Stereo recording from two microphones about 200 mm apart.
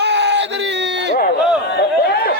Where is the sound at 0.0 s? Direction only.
60° right (ahead or behind).